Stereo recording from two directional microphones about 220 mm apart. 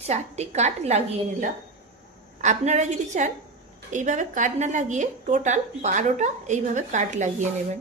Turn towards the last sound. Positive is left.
turn(degrees=-35)  # may be behind; listen again after turning